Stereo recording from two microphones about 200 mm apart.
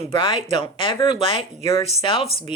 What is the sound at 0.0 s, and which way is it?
Speech, 25° left (ahead or behind).